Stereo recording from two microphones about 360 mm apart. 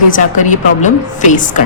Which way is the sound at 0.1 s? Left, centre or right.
Left.